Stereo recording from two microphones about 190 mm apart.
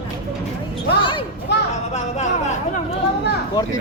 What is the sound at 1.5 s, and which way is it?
Speech, 65° left (ahead or behind).